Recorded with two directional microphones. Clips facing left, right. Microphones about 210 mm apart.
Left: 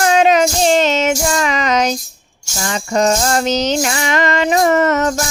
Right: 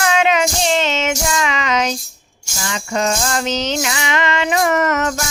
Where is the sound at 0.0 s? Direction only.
40° left (ahead or behind).